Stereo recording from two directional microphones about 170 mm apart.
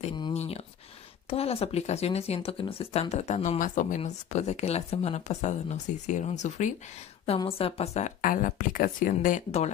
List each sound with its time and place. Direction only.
0.3 s speech: 40° left (ahead or behind)
7.2 s speech: 35° left (ahead or behind)